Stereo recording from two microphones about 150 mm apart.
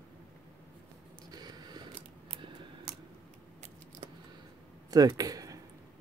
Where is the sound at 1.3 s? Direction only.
25° right (ahead or behind).